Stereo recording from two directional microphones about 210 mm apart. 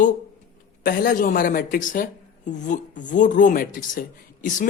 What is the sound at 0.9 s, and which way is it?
Speech, 40° left (ahead or behind).